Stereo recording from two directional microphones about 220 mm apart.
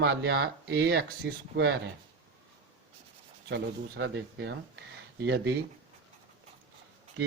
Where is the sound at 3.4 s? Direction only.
50° right (ahead or behind).